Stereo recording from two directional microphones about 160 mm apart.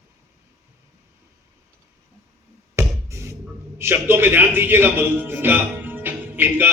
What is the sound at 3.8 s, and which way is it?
A man's voice, 15° right (ahead or behind).